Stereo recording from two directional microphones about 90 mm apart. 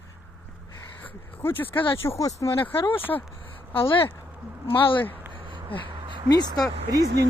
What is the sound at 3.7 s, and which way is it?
Speech, 75° left (ahead or behind).